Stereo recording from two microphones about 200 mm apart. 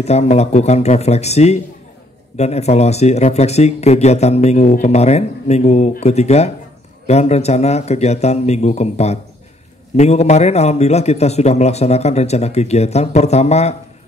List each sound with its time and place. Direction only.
0.0 s speech: 35° left (ahead or behind)